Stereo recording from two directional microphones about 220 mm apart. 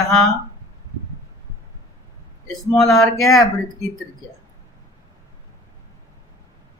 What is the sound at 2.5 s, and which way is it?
Speech, centre (ahead or behind).